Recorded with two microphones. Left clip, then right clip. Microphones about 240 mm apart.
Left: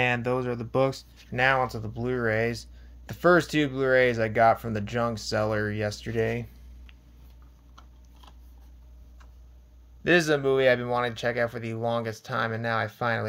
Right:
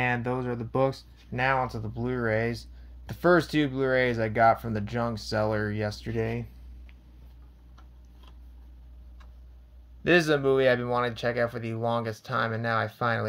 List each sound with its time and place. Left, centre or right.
0.0 s speech: centre
10.0 s speech: centre